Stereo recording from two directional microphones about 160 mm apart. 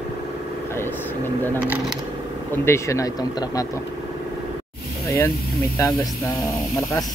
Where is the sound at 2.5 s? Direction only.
15° left (ahead or behind).